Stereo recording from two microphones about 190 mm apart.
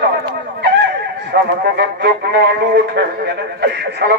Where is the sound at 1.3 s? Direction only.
60° right (ahead or behind).